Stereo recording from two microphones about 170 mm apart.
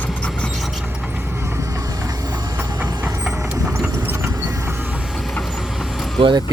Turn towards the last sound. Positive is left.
turn(degrees=-25)  # may be behind; listen again after turning